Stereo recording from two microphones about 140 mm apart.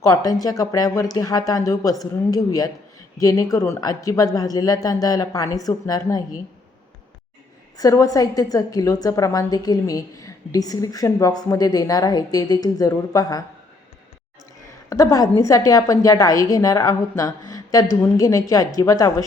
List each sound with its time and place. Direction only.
0.0 s a woman's voice: 25° left (ahead or behind)
7.8 s a woman's voice: 25° left (ahead or behind)
14.8 s a woman's voice: 25° left (ahead or behind)